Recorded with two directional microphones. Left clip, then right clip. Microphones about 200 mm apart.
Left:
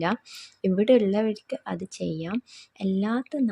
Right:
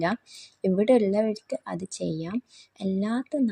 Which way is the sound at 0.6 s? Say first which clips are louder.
Left 1 dB; 10° left (ahead or behind).